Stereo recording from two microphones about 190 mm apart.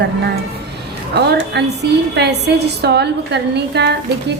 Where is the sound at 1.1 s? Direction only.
60° right (ahead or behind).